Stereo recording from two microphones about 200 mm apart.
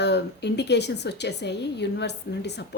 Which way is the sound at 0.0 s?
60° left (ahead or behind).